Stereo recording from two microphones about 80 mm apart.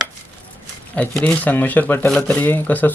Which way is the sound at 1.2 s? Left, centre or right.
Centre.